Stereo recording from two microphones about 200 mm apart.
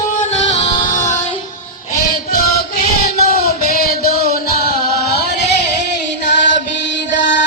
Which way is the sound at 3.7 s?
50° left (ahead or behind).